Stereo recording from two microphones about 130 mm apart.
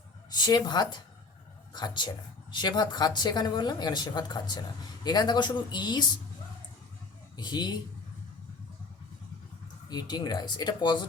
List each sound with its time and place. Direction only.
0.3 s speech: 35° left (ahead or behind)
7.3 s speech: 35° left (ahead or behind)
9.9 s speech: 30° left (ahead or behind)